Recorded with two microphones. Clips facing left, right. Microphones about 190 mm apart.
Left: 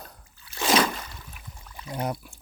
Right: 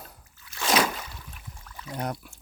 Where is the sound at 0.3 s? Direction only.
30° left (ahead or behind).